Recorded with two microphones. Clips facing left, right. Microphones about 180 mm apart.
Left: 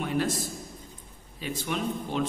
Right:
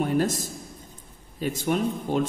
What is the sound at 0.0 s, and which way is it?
Speech, 45° right (ahead or behind).